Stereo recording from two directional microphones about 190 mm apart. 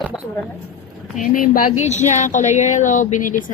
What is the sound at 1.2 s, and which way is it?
Speech, 45° left (ahead or behind).